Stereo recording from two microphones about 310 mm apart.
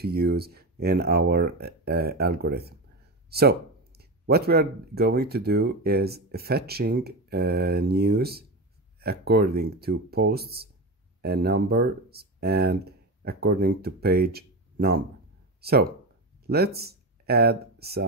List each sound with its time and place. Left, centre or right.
0.0 s speech: right